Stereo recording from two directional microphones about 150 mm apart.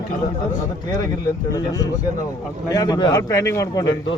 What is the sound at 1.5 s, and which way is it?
Speech, 25° left (ahead or behind).